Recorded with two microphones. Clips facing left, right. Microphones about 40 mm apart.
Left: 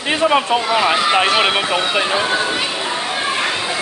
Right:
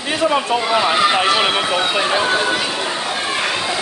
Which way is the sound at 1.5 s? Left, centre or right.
Centre.